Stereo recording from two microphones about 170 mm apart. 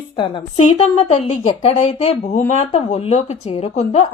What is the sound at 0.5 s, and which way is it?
Speech, 40° left (ahead or behind).